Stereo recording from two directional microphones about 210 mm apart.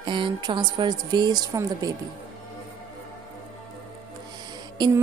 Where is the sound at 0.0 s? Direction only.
25° right (ahead or behind).